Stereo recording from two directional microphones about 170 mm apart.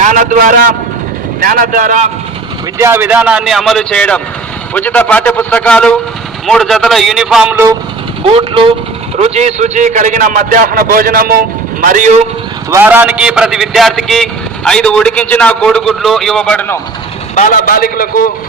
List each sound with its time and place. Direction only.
0.0 s a man's voice: 45° right (ahead or behind)
2.7 s a man's voice: 15° right (ahead or behind)
8.3 s a man's voice: 30° right (ahead or behind); by 12.2 s 50° right (ahead or behind)
12.7 s a man's voice: 10° right (ahead or behind); by 16.8 s 10° left (ahead or behind)
17.3 s a man's voice: 50° left (ahead or behind)